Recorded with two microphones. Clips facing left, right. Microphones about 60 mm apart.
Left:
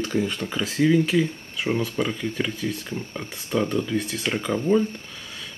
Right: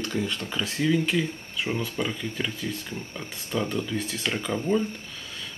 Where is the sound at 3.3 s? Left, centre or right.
Centre.